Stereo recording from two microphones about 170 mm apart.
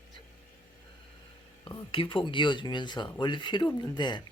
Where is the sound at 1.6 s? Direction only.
30° left (ahead or behind).